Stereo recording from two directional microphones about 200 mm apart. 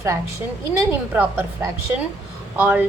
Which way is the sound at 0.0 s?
15° right (ahead or behind).